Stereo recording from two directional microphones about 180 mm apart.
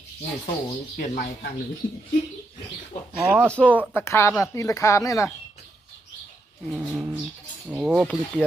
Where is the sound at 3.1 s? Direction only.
Centre (ahead or behind); by 5.3 s 15° left (ahead or behind).